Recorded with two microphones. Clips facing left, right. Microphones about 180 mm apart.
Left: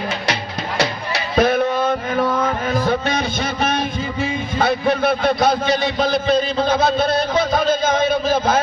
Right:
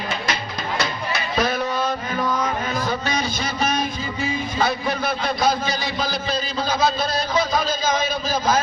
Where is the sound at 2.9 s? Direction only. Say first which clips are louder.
Left 4 dB; 55° left (ahead or behind).